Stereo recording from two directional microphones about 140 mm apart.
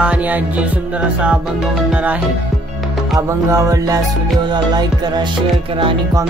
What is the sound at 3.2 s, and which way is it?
Music, 20° right (ahead or behind).